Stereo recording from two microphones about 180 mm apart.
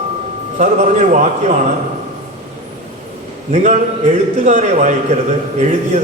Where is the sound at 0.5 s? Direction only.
45° right (ahead or behind).